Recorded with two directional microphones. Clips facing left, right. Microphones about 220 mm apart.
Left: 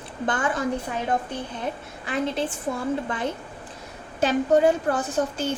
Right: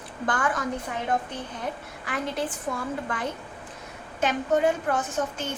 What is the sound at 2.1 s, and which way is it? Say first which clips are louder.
Speech: left 4 dB; 25° left (ahead or behind).